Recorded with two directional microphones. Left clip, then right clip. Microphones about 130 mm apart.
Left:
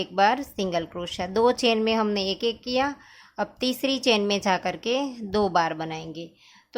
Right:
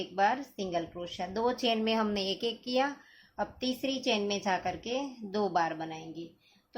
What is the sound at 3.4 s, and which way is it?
A woman's voice, 60° left (ahead or behind).